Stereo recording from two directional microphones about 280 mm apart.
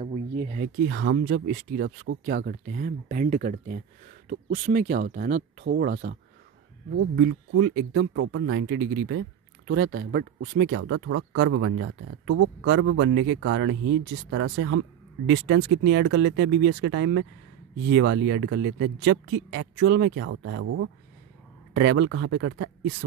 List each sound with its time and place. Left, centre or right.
0.0 s speech: right
0.8 s speech: right
21.7 s speech: right